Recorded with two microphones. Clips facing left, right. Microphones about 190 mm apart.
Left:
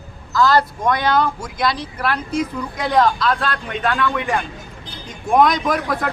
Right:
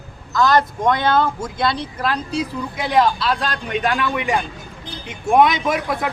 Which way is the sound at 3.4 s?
15° right (ahead or behind).